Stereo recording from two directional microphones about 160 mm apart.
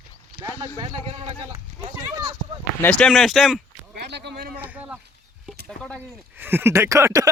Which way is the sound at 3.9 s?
90° right.